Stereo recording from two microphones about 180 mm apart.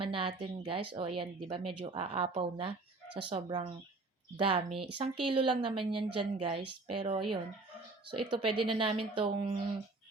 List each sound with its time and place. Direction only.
0.0 s speech: 30° right (ahead or behind)
8.3 s speech: 30° right (ahead or behind)